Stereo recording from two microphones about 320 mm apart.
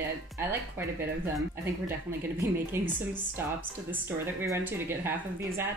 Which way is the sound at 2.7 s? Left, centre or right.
Centre.